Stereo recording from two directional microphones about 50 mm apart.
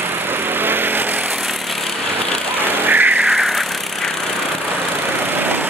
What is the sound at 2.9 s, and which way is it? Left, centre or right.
Music, right.